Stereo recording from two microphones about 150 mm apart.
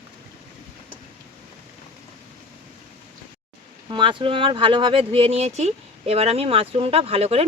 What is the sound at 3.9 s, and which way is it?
Speech, 35° right (ahead or behind).